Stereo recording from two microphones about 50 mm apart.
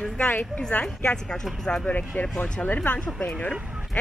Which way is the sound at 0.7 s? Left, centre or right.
Left.